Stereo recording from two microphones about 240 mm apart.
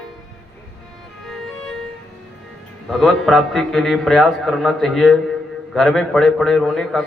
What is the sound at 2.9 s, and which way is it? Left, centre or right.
A man's voice, centre.